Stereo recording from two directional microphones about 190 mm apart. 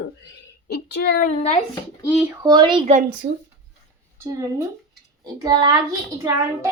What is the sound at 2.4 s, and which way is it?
Speech, 20° right (ahead or behind).